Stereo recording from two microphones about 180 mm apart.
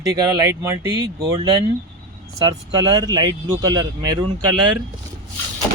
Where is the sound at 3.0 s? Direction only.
20° right (ahead or behind).